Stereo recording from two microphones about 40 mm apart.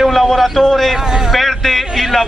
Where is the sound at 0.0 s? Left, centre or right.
Centre.